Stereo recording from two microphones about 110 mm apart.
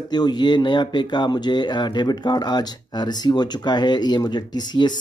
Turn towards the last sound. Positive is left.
turn(degrees=40)  # may be behind; listen again after turning